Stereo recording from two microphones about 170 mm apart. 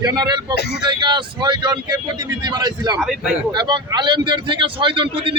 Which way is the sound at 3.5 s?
25° right (ahead or behind).